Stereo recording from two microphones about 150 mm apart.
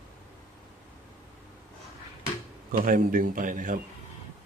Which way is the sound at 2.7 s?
70° right (ahead or behind).